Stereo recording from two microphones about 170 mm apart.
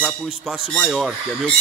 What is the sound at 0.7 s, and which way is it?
Speech, centre (ahead or behind).